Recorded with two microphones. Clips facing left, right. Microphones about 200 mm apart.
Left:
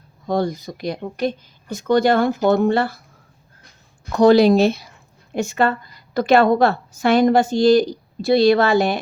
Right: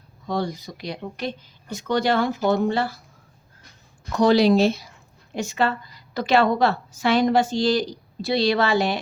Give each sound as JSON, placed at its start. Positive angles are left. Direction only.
{"t": 0.3, "sound": "a woman's voice", "side_deg": 50}
{"t": 4.2, "sound": "a woman's voice", "side_deg": 50}